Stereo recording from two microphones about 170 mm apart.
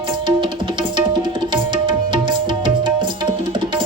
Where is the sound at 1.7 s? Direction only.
30° right (ahead or behind).